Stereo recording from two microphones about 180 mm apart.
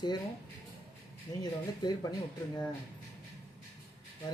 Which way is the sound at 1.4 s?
20° left (ahead or behind).